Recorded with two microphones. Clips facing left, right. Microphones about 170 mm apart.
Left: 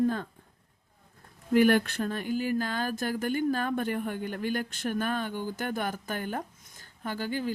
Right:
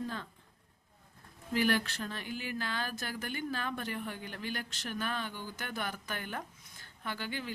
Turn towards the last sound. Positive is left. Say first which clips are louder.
# left 8 dB
turn(degrees=40)  # may be behind; listen again after turning